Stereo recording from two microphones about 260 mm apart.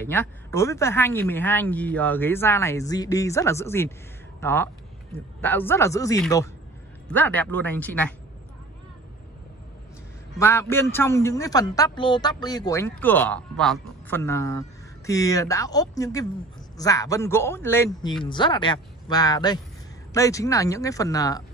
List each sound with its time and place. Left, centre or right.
0.0 s a man's voice: centre
10.4 s a man's voice: centre